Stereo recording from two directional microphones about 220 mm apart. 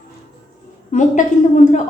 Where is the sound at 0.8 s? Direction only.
35° left (ahead or behind).